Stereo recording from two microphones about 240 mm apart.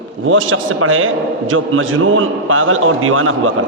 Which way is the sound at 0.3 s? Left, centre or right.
Right.